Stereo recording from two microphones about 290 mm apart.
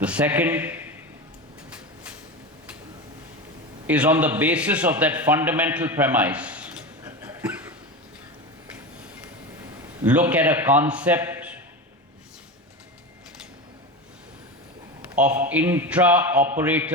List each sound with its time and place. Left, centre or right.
0.0 s a man's voice: centre
3.8 s a man's voice: centre
10.0 s a man's voice: centre
15.1 s a man's voice: centre